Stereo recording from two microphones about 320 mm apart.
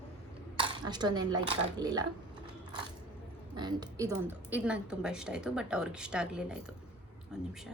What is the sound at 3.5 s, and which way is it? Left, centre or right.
Speech, centre.